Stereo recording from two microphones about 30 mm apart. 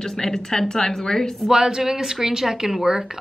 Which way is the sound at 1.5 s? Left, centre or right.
Right.